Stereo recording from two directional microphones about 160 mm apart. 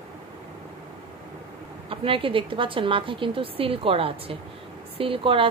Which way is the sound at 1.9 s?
35° right (ahead or behind).